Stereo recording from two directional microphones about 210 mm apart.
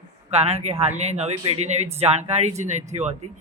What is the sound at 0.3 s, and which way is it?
Speech, 30° right (ahead or behind).